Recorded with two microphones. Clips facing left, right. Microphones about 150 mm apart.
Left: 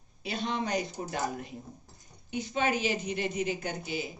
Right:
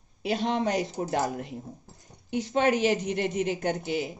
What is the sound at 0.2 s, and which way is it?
A woman's voice, 90° right.